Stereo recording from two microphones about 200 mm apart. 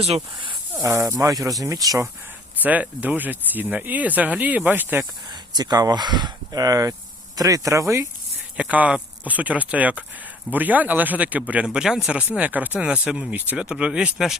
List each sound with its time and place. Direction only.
0.0 s speech: 30° right (ahead or behind)
0.8 s speech: 15° right (ahead or behind)
5.3 s speech: 20° right (ahead or behind); by 14.3 s 5° right (ahead or behind)